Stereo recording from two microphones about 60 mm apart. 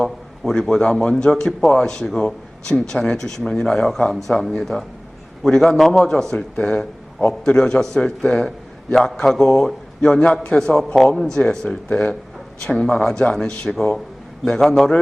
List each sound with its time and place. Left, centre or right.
0.0 s a man's voice: centre
12.6 s speech: centre